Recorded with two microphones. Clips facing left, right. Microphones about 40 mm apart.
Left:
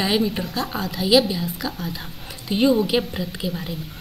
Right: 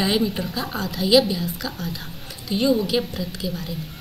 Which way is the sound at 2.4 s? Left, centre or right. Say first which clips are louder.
Left 2 dB; centre.